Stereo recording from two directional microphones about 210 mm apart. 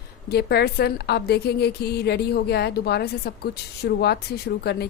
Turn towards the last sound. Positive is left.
turn(degrees=50)  # may be behind; listen again after turning